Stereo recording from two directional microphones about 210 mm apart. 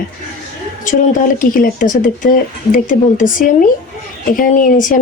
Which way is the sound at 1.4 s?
40° left (ahead or behind).